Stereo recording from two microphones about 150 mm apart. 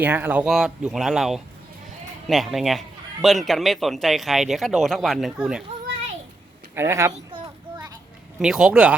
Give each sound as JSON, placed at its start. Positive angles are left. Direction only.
{"t": 0.0, "sound": "a man's voice", "side_deg": -10}
{"t": 6.7, "sound": "a sound", "side_deg": -15}
{"t": 8.4, "sound": "a man's voice", "side_deg": -5}